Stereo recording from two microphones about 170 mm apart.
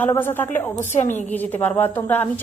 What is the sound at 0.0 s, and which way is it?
A woman's voice, 10° left (ahead or behind).